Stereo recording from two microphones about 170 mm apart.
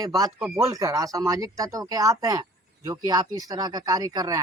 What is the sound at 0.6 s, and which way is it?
Speech, 20° right (ahead or behind).